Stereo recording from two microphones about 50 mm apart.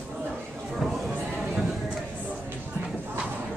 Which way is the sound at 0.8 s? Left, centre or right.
Centre.